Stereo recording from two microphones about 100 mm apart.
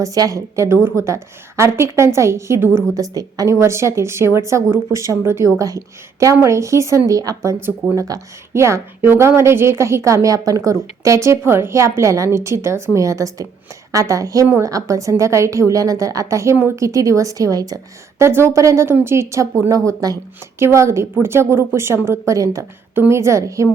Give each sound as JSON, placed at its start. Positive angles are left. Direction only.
{"t": 0.0, "sound": "a woman's voice", "side_deg": -35}
{"t": 18.2, "sound": "a woman's voice", "side_deg": -25}